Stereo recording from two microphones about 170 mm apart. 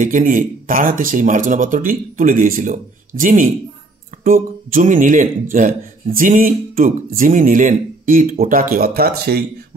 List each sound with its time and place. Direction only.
0.0 s a man's voice: 50° right (ahead or behind)